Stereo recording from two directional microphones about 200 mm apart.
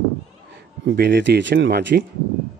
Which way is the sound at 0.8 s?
55° right (ahead or behind).